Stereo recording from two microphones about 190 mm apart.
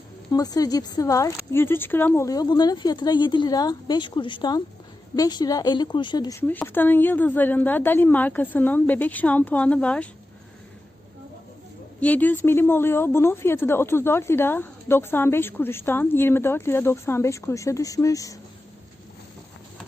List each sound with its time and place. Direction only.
0.3 s a woman's voice: 20° left (ahead or behind)
11.9 s a woman's voice: 10° left (ahead or behind)